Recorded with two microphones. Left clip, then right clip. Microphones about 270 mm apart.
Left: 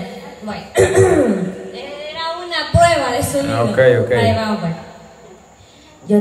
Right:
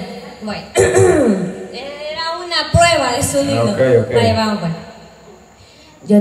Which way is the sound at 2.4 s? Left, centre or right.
Right.